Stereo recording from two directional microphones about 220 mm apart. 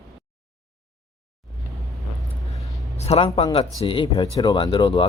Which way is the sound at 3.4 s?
25° left (ahead or behind).